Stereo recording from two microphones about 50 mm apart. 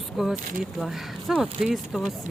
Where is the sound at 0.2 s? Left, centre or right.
Centre.